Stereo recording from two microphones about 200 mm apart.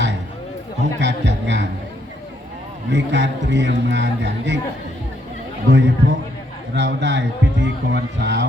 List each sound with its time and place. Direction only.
0.8 s music: 60° right (ahead or behind)
2.9 s speech: 60° right (ahead or behind)
5.7 s speech: 60° right (ahead or behind)